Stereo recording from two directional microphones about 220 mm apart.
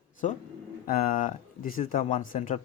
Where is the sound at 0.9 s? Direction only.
40° left (ahead or behind).